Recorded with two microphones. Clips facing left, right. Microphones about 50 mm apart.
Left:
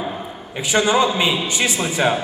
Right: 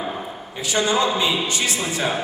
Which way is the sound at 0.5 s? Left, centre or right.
Left.